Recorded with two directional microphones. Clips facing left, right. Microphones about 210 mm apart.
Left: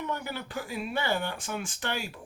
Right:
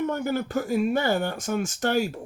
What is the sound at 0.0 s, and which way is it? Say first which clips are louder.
Speech: right 9 dB; 45° right (ahead or behind).